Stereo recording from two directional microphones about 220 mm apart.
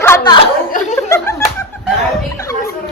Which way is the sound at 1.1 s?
15° left (ahead or behind).